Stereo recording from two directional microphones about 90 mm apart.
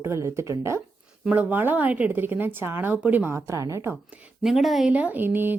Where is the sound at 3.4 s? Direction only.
35° right (ahead or behind).